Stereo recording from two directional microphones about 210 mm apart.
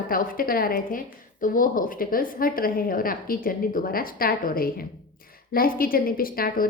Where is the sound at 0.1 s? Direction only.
40° left (ahead or behind).